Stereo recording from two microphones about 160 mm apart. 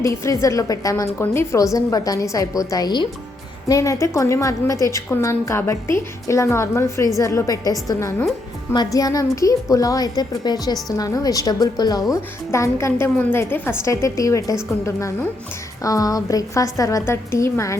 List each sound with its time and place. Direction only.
0.0 s a woman's voice: 20° left (ahead or behind)